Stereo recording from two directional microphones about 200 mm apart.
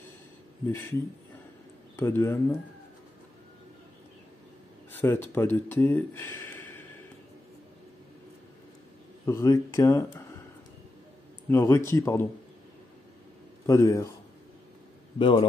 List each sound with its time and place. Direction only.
0.7 s speech: 10° left (ahead or behind)
2.0 s speech: 10° left (ahead or behind)
4.9 s speech: 10° left (ahead or behind)
9.2 s speech: 15° left (ahead or behind)
11.4 s speech: 10° left (ahead or behind)
13.7 s speech: 15° left (ahead or behind)
15.1 s a man's voice: 25° left (ahead or behind)